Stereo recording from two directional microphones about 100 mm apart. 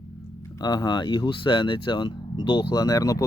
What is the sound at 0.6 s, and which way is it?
Speech, 45° left (ahead or behind).